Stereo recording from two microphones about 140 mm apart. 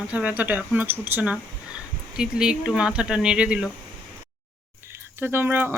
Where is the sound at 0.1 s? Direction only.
10° right (ahead or behind).